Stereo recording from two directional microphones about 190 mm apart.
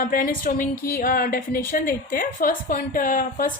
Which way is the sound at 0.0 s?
45° left (ahead or behind).